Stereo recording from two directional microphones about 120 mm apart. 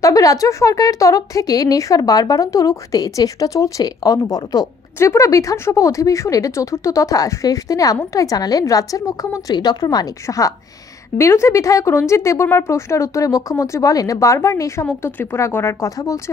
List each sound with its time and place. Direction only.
0.0 s speech: 30° left (ahead or behind)